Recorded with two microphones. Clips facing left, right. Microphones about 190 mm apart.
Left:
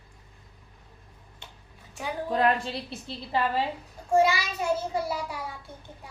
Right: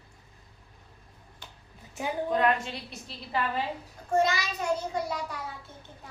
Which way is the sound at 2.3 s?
35° left (ahead or behind).